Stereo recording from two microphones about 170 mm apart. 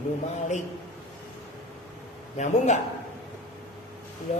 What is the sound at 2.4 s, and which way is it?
Speech, 45° left (ahead or behind).